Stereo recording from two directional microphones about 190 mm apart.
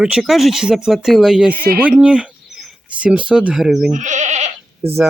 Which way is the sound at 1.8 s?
5° right (ahead or behind).